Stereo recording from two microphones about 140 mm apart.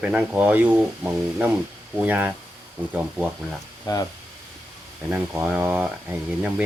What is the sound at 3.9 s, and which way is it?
Speech, 30° left (ahead or behind).